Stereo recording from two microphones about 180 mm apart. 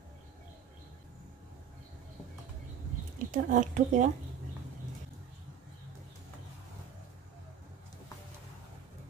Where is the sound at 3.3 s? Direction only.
45° right (ahead or behind).